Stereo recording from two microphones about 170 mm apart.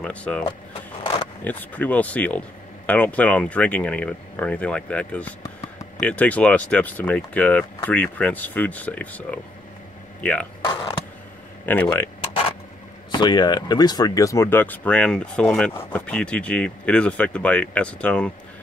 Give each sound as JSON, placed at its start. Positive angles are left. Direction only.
{"t": 0.0, "sound": "speech", "side_deg": 10}
{"t": 1.4, "sound": "speech", "side_deg": 10}
{"t": 10.6, "sound": "a sound", "side_deg": 25}
{"t": 11.6, "sound": "speech", "side_deg": 10}
{"t": 12.2, "sound": "a sound", "side_deg": 35}
{"t": 13.1, "sound": "speech", "side_deg": 25}